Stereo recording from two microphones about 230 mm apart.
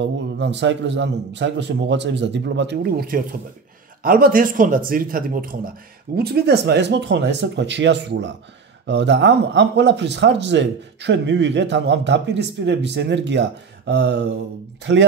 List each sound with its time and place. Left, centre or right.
0.0 s speech: right